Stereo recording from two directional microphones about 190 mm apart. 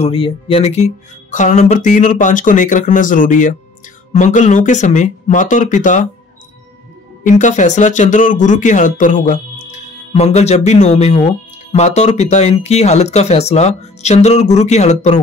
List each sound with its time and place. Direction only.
0.0 s speech: 30° left (ahead or behind)
7.2 s speech: 40° left (ahead or behind)